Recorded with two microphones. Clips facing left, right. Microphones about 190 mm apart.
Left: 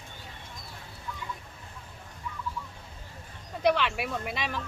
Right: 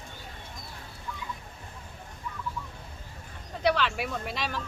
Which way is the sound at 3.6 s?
Centre (ahead or behind).